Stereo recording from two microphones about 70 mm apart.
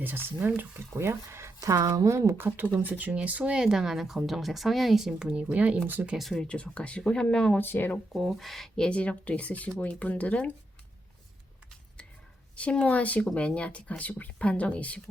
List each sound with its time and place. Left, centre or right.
0.0 s speech: right
0.9 s speech: right
1.6 s speech: right
2.8 s speech: right; by 5.3 s centre
5.3 s speech: centre
6.3 s speech: centre
7.6 s speech: left
8.1 s speech: centre; by 10.5 s left
12.5 s speech: centre